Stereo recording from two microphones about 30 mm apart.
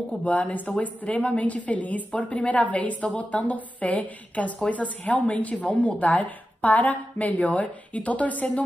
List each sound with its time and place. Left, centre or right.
0.1 s a woman's voice: left
0.7 s a woman's voice: left
3.5 s a woman's voice: left